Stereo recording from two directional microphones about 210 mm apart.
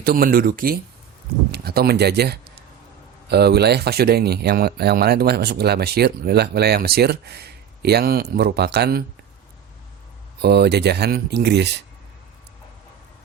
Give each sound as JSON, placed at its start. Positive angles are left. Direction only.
{"t": 0.0, "sound": "speech", "side_deg": -45}
{"t": 10.4, "sound": "speech", "side_deg": -50}